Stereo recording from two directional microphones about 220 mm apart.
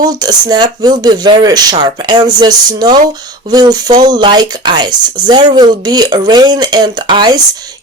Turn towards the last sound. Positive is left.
turn(degrees=-20)  # may be behind; listen again after turning